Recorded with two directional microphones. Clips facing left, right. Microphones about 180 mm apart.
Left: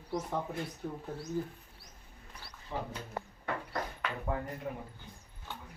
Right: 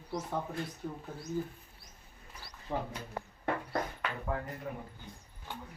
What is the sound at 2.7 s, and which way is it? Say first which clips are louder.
Speech: right 3 dB; 60° right (ahead or behind).